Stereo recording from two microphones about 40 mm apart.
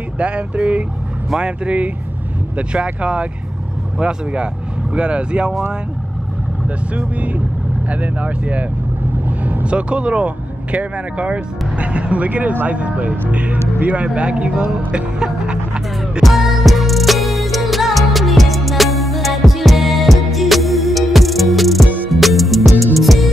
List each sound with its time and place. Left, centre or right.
0.2 s speech: right
7.0 s speech: right
9.7 s speech: right
14.9 s music: right
16.2 s music: centre